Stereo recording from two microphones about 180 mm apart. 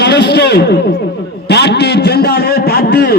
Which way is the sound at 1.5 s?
65° left (ahead or behind).